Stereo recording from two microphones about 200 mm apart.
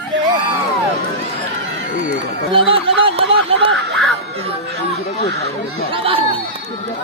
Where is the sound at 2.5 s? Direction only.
25° right (ahead or behind).